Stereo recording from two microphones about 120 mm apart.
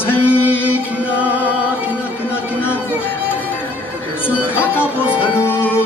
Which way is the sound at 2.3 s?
20° left (ahead or behind).